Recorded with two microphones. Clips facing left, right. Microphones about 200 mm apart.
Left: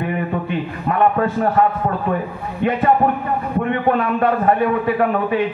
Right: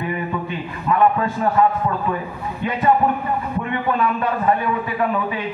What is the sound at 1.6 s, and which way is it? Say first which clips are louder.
Speech: even; 55° left (ahead or behind).